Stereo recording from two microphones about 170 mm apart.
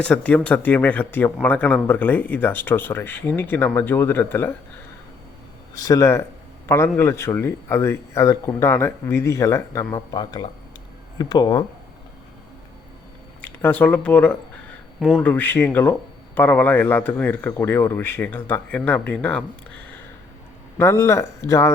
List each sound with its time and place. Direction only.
0.0 s speech: 5° left (ahead or behind)
5.7 s speech: 20° left (ahead or behind)
13.4 s speech: 10° left (ahead or behind)
15.3 s speech: 10° left (ahead or behind)
20.7 s speech: 15° left (ahead or behind)